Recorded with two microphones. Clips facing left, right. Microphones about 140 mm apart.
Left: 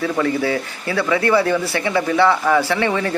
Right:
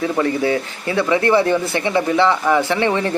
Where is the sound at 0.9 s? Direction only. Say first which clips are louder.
Right 1 dB; 20° right (ahead or behind).